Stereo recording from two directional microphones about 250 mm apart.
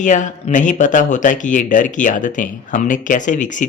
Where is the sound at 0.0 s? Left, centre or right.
Left.